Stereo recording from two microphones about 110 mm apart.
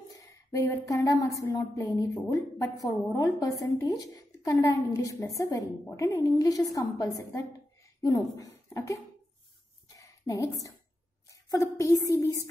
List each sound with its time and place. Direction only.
0.1 s a woman's voice: 30° left (ahead or behind)
9.8 s a sound: 30° left (ahead or behind)
11.5 s a woman's voice: 30° left (ahead or behind)